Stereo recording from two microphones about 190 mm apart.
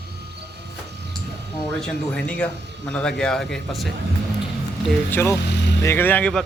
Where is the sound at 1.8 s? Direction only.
5° left (ahead or behind).